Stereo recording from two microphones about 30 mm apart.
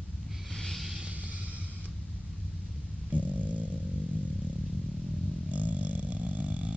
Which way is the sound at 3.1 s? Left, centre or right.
Right.